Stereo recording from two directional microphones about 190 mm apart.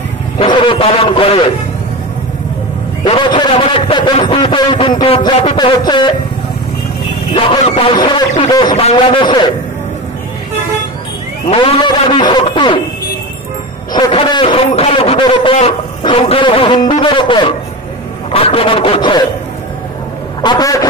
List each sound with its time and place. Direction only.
0.4 s a man's voice: 25° left (ahead or behind)
3.0 s a man's voice: 25° left (ahead or behind)
7.3 s a man's voice: 25° left (ahead or behind)
11.5 s a man's voice: 25° left (ahead or behind)
13.9 s a man's voice: 25° left (ahead or behind)
20.4 s a man's voice: 20° left (ahead or behind)